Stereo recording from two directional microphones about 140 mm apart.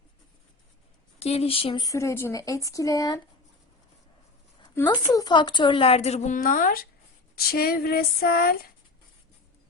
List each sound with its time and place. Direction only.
1.2 s a woman's voice: 45° left (ahead or behind)
1.8 s speech: 20° left (ahead or behind)
5.1 s a woman's voice: 30° left (ahead or behind); by 6.8 s 85° left
7.3 s a sound: 90° left